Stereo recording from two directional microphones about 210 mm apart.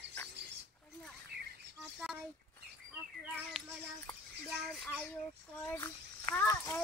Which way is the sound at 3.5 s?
Centre (ahead or behind).